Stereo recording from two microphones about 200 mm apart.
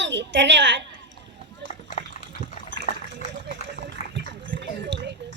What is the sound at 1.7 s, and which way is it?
Dog, 40° left (ahead or behind).